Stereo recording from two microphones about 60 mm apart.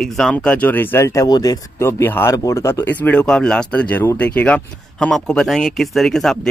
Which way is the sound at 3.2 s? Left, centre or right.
Centre.